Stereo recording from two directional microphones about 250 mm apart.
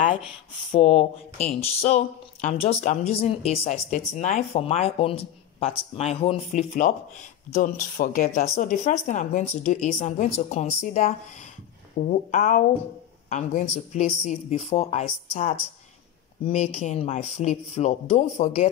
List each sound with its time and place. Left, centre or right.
0.7 s a woman's voice: left